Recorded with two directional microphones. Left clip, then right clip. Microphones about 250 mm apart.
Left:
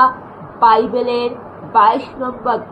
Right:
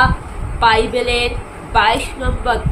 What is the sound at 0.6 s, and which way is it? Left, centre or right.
A woman's voice, centre.